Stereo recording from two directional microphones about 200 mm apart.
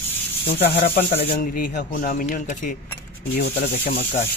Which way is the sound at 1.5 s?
45° left (ahead or behind).